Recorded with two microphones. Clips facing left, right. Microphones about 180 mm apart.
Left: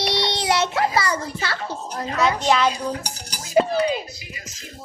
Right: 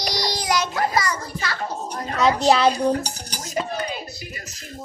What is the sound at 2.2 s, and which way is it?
Speech, 35° right (ahead or behind).